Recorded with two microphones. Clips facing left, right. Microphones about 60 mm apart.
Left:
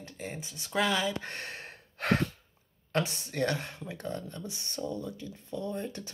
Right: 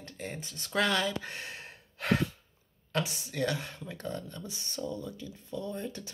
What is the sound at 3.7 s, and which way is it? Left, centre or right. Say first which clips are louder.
Speech: left 1 dB; left.